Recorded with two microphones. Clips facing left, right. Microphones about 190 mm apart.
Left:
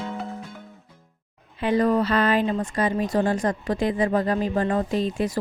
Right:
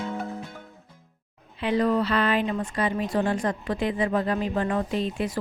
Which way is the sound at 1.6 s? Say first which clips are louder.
Left 2 dB; 45° left (ahead or behind).